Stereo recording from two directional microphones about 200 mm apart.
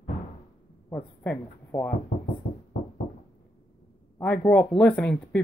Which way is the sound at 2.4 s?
35° left (ahead or behind).